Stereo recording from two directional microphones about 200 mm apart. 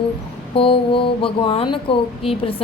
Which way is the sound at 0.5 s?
25° left (ahead or behind).